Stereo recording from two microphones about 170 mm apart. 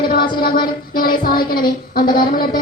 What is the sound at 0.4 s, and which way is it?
Child singing, 60° left (ahead or behind).